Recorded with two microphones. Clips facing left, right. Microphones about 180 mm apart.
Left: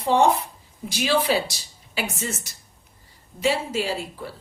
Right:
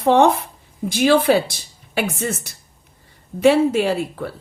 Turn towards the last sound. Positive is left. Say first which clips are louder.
# right 8 dB
turn(degrees=-60)  # may be behind; listen again after turning